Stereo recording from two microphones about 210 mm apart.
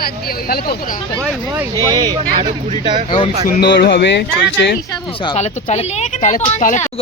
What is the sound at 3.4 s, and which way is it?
Speech, 50° left (ahead or behind).